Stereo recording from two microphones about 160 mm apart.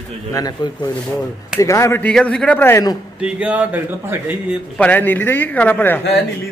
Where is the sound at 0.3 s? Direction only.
25° left (ahead or behind).